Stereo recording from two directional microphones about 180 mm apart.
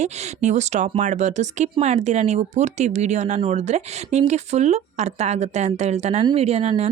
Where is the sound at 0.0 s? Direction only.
40° right (ahead or behind).